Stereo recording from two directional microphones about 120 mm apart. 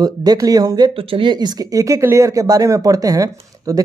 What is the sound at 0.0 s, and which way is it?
Speech, 30° right (ahead or behind).